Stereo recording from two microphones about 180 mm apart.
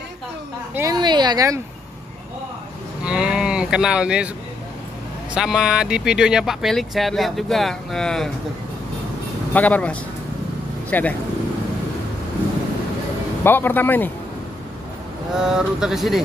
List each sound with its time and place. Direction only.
0.7 s a sound: 20° right (ahead or behind)
3.0 s cattle: 5° right (ahead or behind)
5.3 s speech: 5° right (ahead or behind)
9.5 s speech: 10° left (ahead or behind)
13.4 s speech: 10° left (ahead or behind)
15.3 s speech: 5° right (ahead or behind)